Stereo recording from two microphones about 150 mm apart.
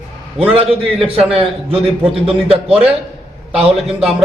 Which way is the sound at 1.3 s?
40° right (ahead or behind).